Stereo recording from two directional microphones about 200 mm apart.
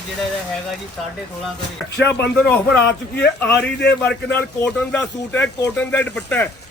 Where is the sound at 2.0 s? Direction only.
55° left (ahead or behind).